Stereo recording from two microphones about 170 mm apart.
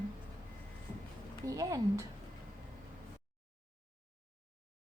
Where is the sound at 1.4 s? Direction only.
20° right (ahead or behind).